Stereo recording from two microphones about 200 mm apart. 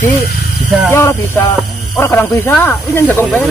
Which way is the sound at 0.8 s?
10° left (ahead or behind).